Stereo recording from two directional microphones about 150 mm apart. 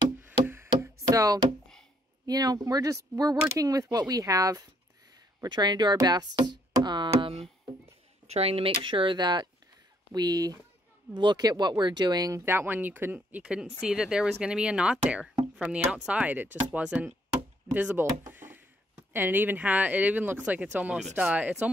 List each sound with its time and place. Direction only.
0.2 s knock: 15° right (ahead or behind)
2.2 s speech: 25° right (ahead or behind); by 18.0 s 10° right (ahead or behind)
18.3 s a sound: 15° right (ahead or behind)
19.1 s speech: 15° right (ahead or behind)